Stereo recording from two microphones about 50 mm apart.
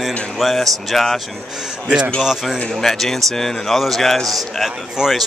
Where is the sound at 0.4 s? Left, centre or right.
Centre.